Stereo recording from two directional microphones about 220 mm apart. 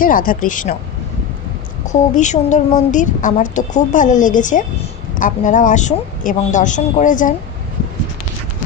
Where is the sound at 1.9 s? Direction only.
35° left (ahead or behind).